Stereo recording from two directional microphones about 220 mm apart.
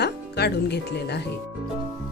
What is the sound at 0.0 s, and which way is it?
Speech, 50° left (ahead or behind).